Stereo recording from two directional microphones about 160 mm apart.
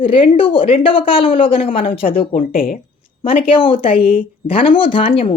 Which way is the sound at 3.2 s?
35° left (ahead or behind).